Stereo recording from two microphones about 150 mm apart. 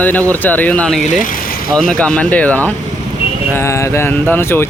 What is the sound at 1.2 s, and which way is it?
Vehicle, 65° left (ahead or behind).